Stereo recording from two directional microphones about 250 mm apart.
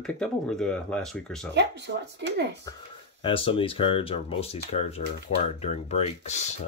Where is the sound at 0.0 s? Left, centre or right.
Centre.